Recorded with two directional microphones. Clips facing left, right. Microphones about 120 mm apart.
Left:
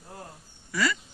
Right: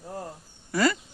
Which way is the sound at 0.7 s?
45° right (ahead or behind).